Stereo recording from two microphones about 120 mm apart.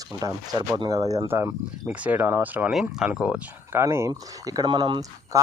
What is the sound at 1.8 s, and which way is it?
Speech, 10° right (ahead or behind).